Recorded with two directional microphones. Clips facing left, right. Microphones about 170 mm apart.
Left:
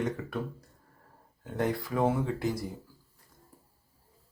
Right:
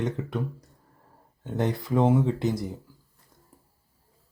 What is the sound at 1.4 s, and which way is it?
Speech, 25° right (ahead or behind).